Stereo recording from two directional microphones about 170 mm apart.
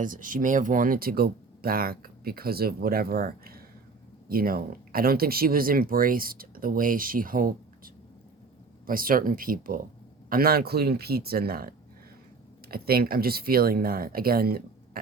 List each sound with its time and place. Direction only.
0.0 s speech: 50° right (ahead or behind)
8.9 s speech: 55° right (ahead or behind)